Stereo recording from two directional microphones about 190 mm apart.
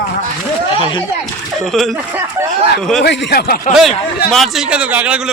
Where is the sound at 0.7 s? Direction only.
25° left (ahead or behind).